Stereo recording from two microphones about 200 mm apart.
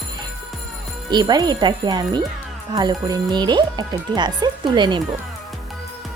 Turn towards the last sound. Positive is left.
turn(degrees=-25)  # may be behind; listen again after turning